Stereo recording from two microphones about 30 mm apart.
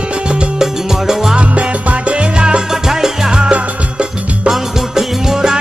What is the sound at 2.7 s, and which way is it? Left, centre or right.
Music, centre.